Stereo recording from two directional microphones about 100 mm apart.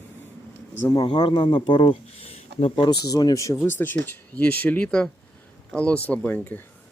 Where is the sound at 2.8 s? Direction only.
45° left (ahead or behind).